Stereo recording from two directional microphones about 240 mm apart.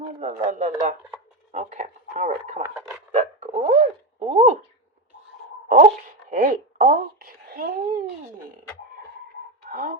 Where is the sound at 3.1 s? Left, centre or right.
Right.